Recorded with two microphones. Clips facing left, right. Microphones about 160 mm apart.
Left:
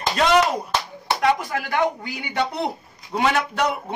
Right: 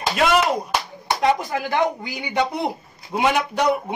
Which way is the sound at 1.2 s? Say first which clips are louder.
Right 1 dB; 20° right (ahead or behind).